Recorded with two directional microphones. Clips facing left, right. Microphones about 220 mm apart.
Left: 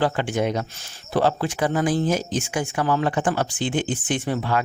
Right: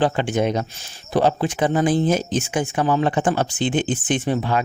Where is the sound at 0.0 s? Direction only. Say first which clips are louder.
Right 3 dB; 20° right (ahead or behind).